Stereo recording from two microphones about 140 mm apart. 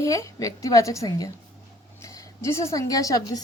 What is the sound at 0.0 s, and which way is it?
A woman's voice, 20° left (ahead or behind).